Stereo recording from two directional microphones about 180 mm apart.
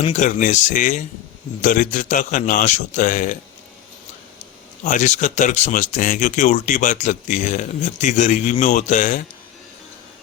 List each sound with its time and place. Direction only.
0.0 s speech: 40° left (ahead or behind)
4.8 s speech: 40° left (ahead or behind)